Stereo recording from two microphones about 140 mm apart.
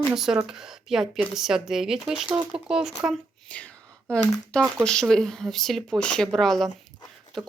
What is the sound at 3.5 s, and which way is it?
Speech, 10° left (ahead or behind).